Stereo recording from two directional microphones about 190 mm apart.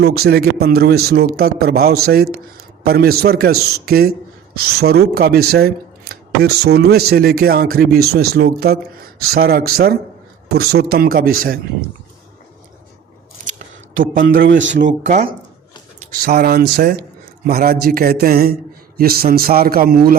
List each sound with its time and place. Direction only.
0.0 s speech: 55° right (ahead or behind)
14.0 s speech: 45° right (ahead or behind)
14.6 s speech: 70° right (ahead or behind)
14.8 s speech: 40° right (ahead or behind)
16.0 s speech: 50° right (ahead or behind)